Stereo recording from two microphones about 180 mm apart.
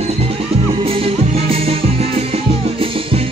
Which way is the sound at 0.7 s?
30° right (ahead or behind).